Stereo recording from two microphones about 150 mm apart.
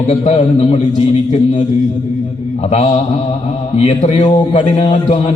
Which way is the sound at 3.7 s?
45° left (ahead or behind).